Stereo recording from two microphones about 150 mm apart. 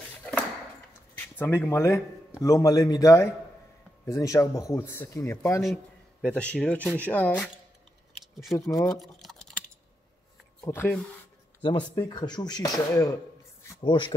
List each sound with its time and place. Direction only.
1.1 s a man's voice: 15° left (ahead or behind)
6.2 s speech: 10° left (ahead or behind)
8.2 s a sound: centre (ahead or behind)
8.5 s speech: 20° left (ahead or behind)
8.8 s typing: centre (ahead or behind)
10.6 s speech: 15° left (ahead or behind)
11.6 s speech: 30° left (ahead or behind)